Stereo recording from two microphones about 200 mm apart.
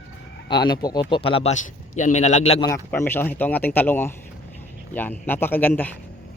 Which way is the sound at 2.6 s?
15° left (ahead or behind).